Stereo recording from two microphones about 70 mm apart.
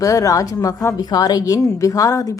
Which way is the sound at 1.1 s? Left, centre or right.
Left.